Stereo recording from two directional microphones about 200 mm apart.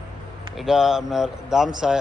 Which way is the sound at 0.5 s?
Centre (ahead or behind).